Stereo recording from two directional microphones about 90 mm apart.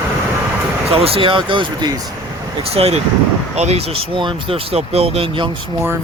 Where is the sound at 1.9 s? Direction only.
45° right (ahead or behind).